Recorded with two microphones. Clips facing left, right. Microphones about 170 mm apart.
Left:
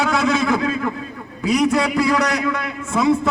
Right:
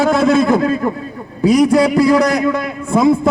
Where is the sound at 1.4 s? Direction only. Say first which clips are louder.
Right 7 dB; 35° right (ahead or behind).